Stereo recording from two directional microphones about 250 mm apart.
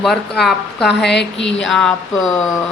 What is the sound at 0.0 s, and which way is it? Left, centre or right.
Speech, centre.